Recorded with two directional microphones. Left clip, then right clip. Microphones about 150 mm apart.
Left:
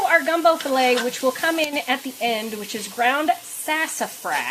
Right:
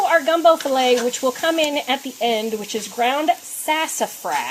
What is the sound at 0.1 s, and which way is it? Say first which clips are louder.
Speech: right 3 dB; 30° right (ahead or behind).